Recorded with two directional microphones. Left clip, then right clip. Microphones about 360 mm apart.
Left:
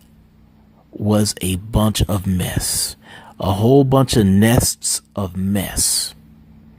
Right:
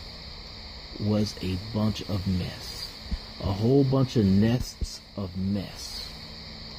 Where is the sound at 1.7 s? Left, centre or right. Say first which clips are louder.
Left 13 dB; left.